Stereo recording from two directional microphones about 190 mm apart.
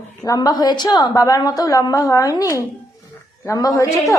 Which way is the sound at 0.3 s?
20° left (ahead or behind).